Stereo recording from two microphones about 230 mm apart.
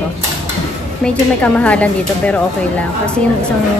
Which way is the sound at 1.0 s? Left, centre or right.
Centre.